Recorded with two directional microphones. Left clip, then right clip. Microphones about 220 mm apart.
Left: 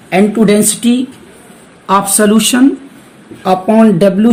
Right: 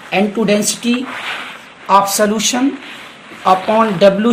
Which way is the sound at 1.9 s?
35° left (ahead or behind).